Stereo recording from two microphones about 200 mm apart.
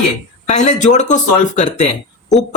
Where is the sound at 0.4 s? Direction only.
35° left (ahead or behind).